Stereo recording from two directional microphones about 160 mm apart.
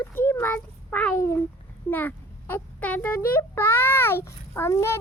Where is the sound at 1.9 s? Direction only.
10° left (ahead or behind).